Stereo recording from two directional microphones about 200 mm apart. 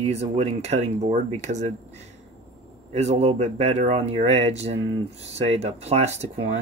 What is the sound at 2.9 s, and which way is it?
Speech, 35° right (ahead or behind).